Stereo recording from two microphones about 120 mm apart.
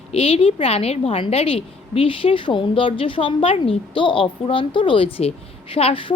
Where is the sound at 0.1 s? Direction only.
55° left (ahead or behind).